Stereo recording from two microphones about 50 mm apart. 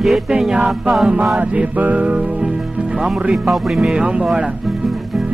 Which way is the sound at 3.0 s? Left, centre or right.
Centre.